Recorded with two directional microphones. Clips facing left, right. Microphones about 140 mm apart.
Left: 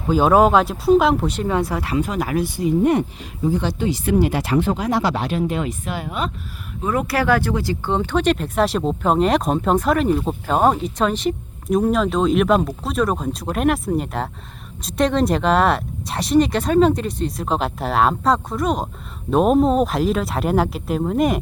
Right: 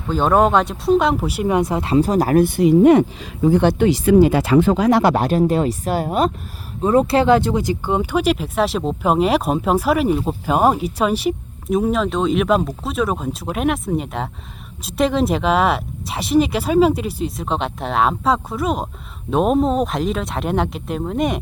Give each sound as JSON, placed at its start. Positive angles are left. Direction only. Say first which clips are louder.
{"t": 0.1, "sound": "speech", "louder": "left 1 dB", "side_deg": 5}
{"t": 5.1, "sound": "speech", "louder": "right 6 dB", "side_deg": -45}
{"t": 6.8, "sound": "speech", "louder": "right 5 dB", "side_deg": -30}